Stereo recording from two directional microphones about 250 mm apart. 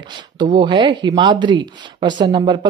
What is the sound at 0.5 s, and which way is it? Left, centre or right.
Speech, centre.